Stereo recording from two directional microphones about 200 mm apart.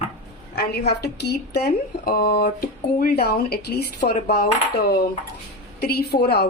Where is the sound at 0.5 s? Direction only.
55° left (ahead or behind).